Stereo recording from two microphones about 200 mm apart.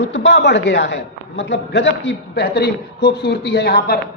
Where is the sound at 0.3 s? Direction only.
60° left (ahead or behind).